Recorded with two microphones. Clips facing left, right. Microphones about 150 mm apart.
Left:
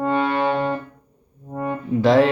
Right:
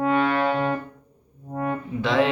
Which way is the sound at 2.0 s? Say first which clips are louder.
Left 6 dB; 40° left (ahead or behind).